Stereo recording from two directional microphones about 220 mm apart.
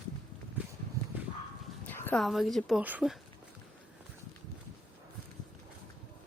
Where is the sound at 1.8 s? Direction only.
10° left (ahead or behind).